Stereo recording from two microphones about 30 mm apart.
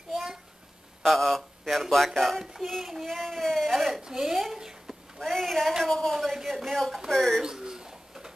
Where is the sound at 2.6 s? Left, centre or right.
Centre.